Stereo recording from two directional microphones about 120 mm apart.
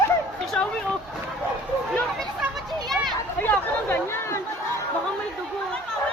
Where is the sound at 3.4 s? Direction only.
15° left (ahead or behind).